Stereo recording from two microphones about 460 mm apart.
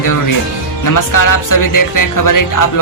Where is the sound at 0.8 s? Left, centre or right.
Left.